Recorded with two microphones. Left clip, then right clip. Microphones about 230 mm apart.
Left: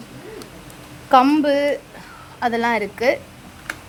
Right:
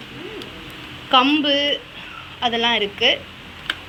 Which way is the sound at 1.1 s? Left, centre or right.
Centre.